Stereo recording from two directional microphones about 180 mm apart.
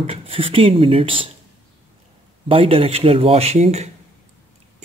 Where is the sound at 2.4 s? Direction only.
30° right (ahead or behind).